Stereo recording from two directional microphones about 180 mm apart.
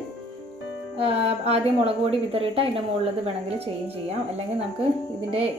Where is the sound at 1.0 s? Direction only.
35° right (ahead or behind).